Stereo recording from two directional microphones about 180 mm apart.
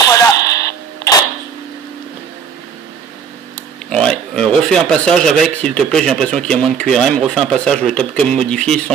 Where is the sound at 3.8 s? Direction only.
5° left (ahead or behind).